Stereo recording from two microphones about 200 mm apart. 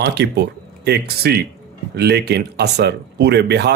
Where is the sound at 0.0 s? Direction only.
55° right (ahead or behind).